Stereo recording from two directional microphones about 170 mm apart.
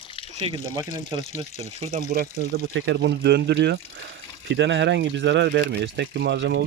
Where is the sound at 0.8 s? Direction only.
45° left (ahead or behind).